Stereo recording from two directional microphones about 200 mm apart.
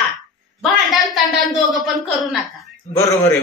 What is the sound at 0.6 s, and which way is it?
A man's voice, centre (ahead or behind).